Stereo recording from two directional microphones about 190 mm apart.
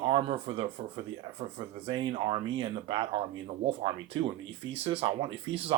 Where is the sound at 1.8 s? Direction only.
30° right (ahead or behind).